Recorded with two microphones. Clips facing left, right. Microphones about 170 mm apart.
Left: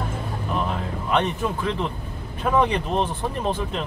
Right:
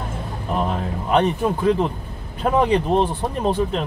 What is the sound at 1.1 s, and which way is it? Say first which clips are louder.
Speech: right 5 dB; 35° right (ahead or behind).